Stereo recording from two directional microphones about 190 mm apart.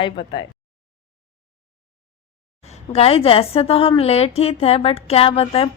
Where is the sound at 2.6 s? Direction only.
35° left (ahead or behind).